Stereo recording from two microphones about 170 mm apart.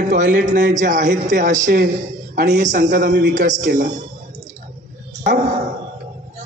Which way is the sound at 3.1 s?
75° right (ahead or behind).